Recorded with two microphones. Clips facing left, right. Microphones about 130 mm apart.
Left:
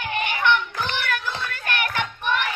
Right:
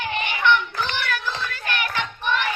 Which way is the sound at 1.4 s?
55° left (ahead or behind).